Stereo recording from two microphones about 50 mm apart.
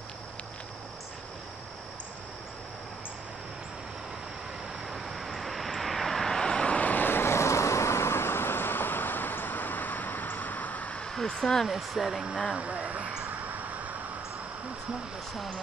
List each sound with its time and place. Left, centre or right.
4.9 s vehicle: centre
6.7 s vehicle: left
7.1 s vehicle: left
11.0 s a sound: centre
11.6 s speech: centre
12.5 s a sound: right